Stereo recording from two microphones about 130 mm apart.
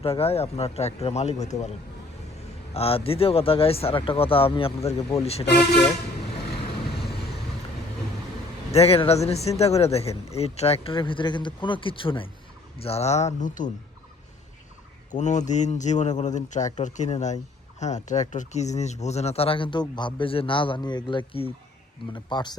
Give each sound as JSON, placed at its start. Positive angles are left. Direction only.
{"t": 0.0, "sound": "speech", "side_deg": 50}
{"t": 2.7, "sound": "speech", "side_deg": 50}
{"t": 8.7, "sound": "speech", "side_deg": 50}
{"t": 12.8, "sound": "a man's voice", "side_deg": 55}
{"t": 15.1, "sound": "a man's voice", "side_deg": 65}